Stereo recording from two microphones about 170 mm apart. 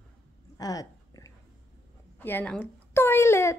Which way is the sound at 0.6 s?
20° left (ahead or behind).